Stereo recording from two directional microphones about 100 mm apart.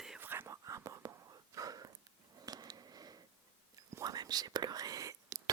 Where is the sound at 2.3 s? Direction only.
40° right (ahead or behind).